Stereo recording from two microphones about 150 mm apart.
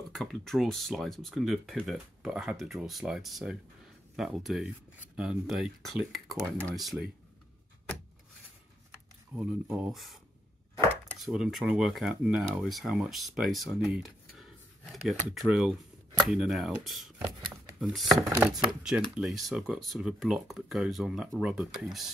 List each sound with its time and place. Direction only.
0.1 s speech: centre (ahead or behind)
9.3 s speech: 10° right (ahead or behind)
11.2 s speech: centre (ahead or behind)
15.3 s speech: 5° right (ahead or behind)
18.3 s speech: 25° right (ahead or behind)
18.8 s speech: 5° right (ahead or behind)